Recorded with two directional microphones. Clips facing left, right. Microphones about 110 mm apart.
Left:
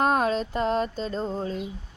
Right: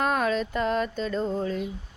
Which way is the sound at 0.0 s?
35° left (ahead or behind).